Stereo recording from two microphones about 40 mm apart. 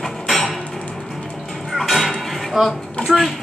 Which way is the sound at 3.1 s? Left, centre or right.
Centre.